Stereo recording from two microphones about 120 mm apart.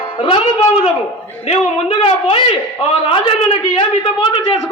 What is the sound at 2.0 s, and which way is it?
Speech, 50° left (ahead or behind).